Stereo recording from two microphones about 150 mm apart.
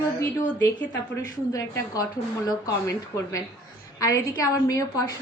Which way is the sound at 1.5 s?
20° left (ahead or behind).